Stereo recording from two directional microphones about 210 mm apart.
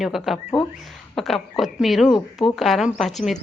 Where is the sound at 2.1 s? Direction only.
20° left (ahead or behind).